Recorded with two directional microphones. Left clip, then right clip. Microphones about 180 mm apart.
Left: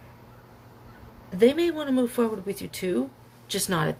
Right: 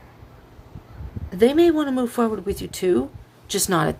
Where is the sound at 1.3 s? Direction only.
45° right (ahead or behind).